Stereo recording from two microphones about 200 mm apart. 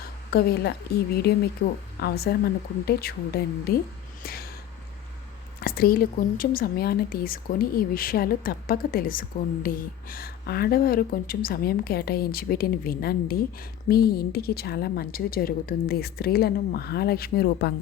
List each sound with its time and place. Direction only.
0.3 s a woman's voice: 50° left (ahead or behind)
4.2 s a sound: 50° left (ahead or behind)
5.6 s a woman's voice: 45° left (ahead or behind)